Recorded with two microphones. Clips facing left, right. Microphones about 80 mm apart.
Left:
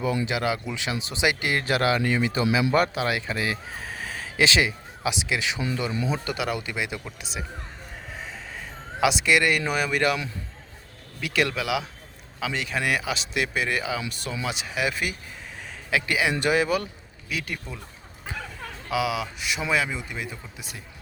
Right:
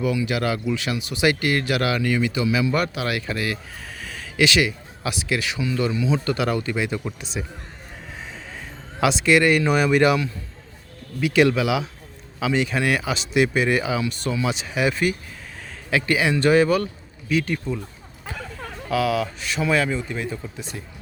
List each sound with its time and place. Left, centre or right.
0.3 s speech: centre
3.8 s a sound: left
6.1 s speech: centre
9.0 s speech: centre
11.2 s speech: centre
18.9 s speech: centre